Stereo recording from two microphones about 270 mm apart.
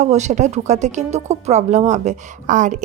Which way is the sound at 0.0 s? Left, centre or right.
Right.